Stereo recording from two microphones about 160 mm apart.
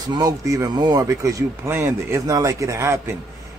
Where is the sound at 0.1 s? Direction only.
20° right (ahead or behind).